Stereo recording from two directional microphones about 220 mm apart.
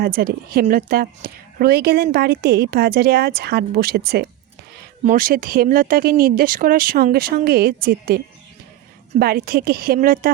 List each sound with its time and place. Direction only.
0.0 s a woman's voice: 45° right (ahead or behind)